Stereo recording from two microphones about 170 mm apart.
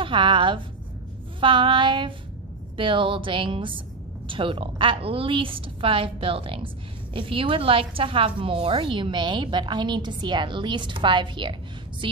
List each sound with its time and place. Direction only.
0.0 s a woman's voice: 30° right (ahead or behind)